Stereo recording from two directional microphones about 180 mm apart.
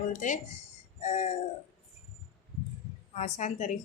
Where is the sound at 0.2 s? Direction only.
45° left (ahead or behind).